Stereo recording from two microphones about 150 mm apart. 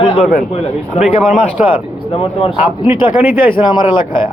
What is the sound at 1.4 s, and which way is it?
Speech, 45° left (ahead or behind).